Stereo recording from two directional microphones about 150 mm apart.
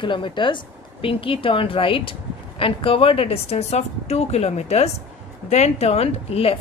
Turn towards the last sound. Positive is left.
turn(degrees=40)  # may be behind; listen again after turning